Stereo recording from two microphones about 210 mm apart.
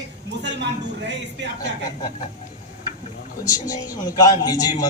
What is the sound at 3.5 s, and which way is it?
A man's voice, 15° left (ahead or behind).